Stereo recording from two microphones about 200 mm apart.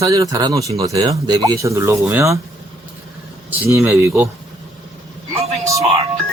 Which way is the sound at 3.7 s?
10° right (ahead or behind).